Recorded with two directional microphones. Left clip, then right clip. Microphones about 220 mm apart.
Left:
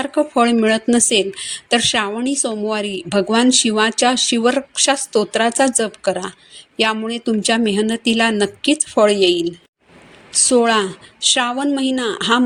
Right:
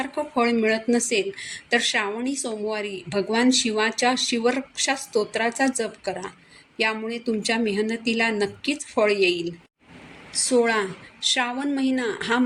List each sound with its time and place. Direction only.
0.0 s speech: 35° left (ahead or behind)
10.3 s speech: 35° left (ahead or behind)